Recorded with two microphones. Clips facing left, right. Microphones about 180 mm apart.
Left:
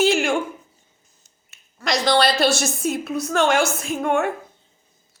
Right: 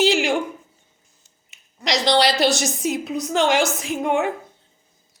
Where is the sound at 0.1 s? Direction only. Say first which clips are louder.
Even; 15° right (ahead or behind).